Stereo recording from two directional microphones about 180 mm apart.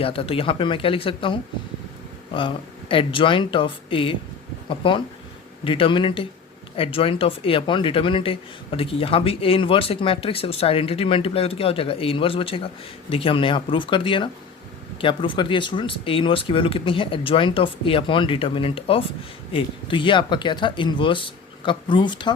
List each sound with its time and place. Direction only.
0.0 s speech: 30° left (ahead or behind)